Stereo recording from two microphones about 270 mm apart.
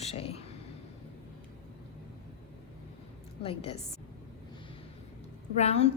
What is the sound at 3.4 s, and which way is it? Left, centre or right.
Speech, left.